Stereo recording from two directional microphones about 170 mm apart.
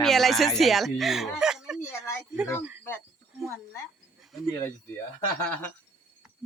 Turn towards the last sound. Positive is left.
turn(degrees=10)  # may be behind; listen again after turning